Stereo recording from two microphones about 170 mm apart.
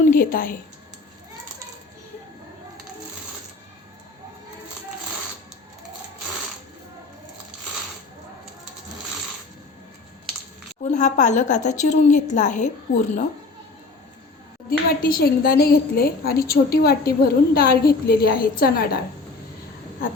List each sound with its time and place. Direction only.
0.1 s a sound: 55° left (ahead or behind)
10.9 s a woman's voice: 45° left (ahead or behind)
14.7 s a woman's voice: 60° left (ahead or behind)